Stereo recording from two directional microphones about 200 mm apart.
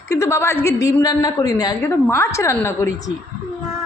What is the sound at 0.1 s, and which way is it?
A woman's voice, 15° left (ahead or behind).